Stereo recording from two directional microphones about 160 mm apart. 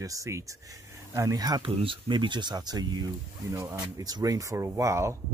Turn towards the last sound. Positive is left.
turn(degrees=-20)  # may be behind; listen again after turning